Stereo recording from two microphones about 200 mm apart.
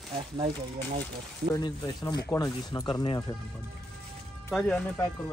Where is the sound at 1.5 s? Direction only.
20° left (ahead or behind).